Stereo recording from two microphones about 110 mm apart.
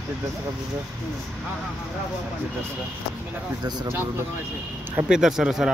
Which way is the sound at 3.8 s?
20° right (ahead or behind).